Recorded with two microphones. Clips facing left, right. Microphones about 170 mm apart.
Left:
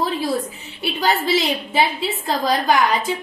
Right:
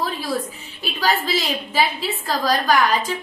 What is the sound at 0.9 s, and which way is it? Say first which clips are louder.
A woman's voice: left 2 dB; 20° left (ahead or behind).